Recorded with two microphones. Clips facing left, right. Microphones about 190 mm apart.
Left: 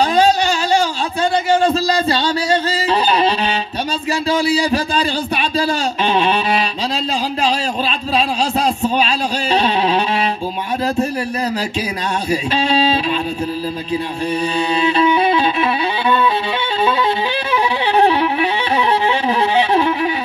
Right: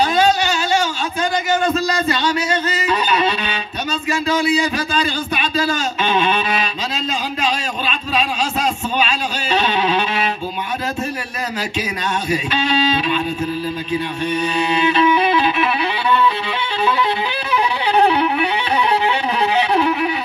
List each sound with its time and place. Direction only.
0.0 s a sound: 35° left (ahead or behind)
1.5 s music: 30° left (ahead or behind)
4.1 s a man's voice: 30° left (ahead or behind)
5.6 s a sound: 35° left (ahead or behind)
9.5 s music: 35° left (ahead or behind)
12.3 s a man's voice: 30° left (ahead or behind)
14.3 s music: 30° left (ahead or behind)
19.5 s music: 30° left (ahead or behind)